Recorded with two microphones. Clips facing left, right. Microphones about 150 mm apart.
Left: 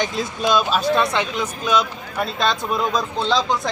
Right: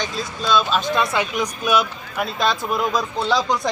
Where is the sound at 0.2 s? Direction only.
15° left (ahead or behind).